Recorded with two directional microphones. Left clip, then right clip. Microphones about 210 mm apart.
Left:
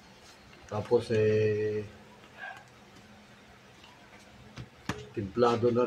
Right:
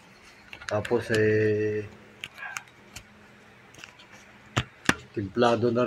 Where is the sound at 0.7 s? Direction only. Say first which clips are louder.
Right 2 dB; 30° right (ahead or behind).